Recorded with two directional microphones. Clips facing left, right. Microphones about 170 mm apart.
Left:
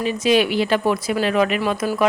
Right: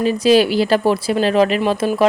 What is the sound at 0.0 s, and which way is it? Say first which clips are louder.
Speech: right 5 dB; 35° right (ahead or behind).